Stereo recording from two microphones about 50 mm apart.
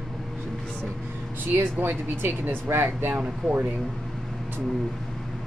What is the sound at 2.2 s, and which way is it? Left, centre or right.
Speech, right.